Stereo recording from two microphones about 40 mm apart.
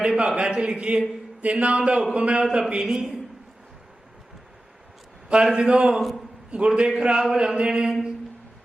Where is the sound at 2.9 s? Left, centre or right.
Centre.